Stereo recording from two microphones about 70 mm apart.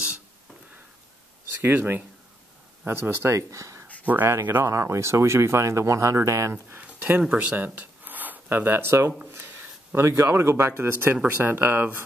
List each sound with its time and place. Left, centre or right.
1.6 s speech: right
3.3 s speech: right
4.0 s speech: right
4.3 s speech: right
6.5 s speech: right
9.3 s a sound: right
10.1 s speech: right